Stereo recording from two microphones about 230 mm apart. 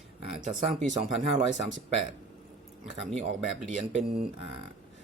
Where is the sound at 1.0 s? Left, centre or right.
Right.